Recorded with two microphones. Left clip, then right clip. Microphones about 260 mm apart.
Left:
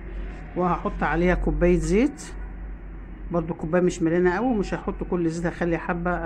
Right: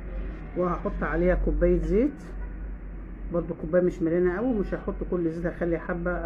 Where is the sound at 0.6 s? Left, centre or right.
Left.